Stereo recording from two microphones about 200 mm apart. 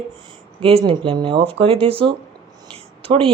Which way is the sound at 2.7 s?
25° right (ahead or behind).